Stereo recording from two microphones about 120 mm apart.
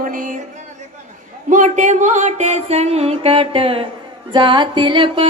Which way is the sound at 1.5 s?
90° right.